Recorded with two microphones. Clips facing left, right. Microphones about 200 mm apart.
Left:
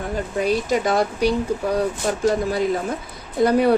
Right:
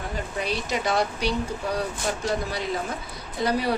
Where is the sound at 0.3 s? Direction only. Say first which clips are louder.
Left 9 dB; 45° left (ahead or behind).